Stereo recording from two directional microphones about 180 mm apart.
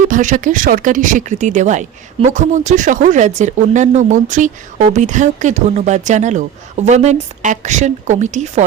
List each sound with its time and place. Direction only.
0.1 s speech: 45° right (ahead or behind)